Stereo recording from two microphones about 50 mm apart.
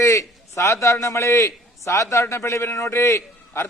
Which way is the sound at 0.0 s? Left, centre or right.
Left.